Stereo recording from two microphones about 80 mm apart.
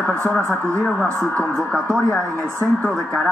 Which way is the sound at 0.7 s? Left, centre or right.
Centre.